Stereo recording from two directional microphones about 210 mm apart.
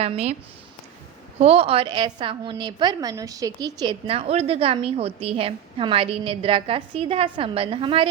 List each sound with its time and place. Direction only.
0.0 s a woman's voice: 30° right (ahead or behind)
1.4 s a woman's voice: 30° right (ahead or behind)